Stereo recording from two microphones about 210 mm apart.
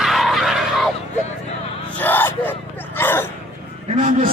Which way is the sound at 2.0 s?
10° left (ahead or behind).